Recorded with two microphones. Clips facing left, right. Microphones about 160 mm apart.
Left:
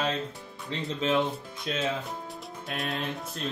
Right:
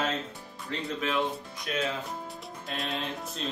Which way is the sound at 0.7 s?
25° left (ahead or behind).